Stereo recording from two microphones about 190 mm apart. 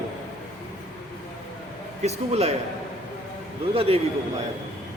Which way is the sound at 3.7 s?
30° right (ahead or behind).